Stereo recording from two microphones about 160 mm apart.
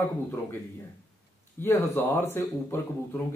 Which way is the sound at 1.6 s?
15° left (ahead or behind).